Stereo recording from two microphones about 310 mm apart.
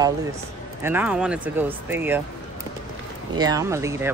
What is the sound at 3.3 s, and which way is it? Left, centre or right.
Speech, centre.